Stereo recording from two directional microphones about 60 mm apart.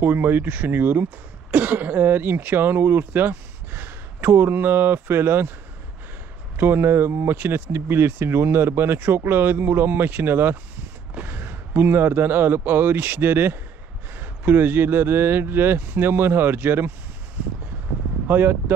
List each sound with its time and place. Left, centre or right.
0.0 s speech: right
6.5 s speech: right
18.2 s speech: right